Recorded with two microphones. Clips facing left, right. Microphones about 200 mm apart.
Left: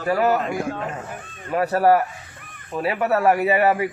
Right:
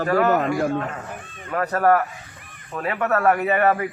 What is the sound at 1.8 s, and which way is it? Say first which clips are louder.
Speech: even; 15° left (ahead or behind).